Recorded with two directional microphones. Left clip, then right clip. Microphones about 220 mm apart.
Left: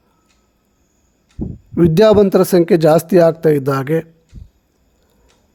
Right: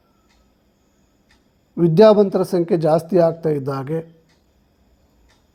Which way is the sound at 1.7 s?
55° left (ahead or behind).